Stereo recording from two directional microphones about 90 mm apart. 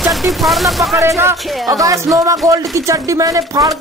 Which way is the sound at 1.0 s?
30° right (ahead or behind).